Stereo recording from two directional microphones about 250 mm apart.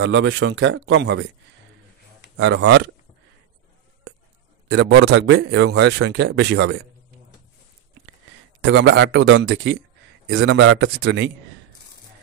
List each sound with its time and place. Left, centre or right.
0.0 s a man's voice: right
2.3 s a man's voice: right
4.6 s a man's voice: right
8.5 s a man's voice: right